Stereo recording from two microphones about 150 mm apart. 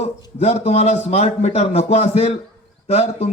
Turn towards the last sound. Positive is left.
turn(degrees=45)  # may be behind; listen again after turning